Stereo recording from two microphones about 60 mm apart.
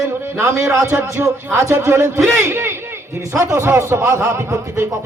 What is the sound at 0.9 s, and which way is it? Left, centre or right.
Speech, right.